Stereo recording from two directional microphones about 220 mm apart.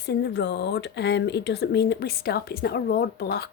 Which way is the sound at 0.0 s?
50° left (ahead or behind).